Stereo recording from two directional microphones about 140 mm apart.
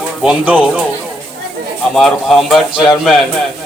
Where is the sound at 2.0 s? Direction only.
Centre (ahead or behind).